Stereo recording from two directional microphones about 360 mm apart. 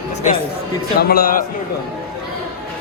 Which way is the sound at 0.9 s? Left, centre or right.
Left.